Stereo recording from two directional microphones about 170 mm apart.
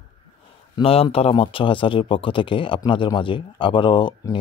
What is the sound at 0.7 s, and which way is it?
Speech, 30° left (ahead or behind).